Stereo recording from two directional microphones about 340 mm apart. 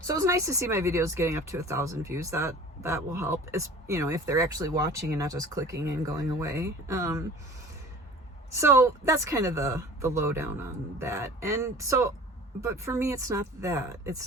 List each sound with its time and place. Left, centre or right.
0.0 s speech: centre
8.5 s speech: centre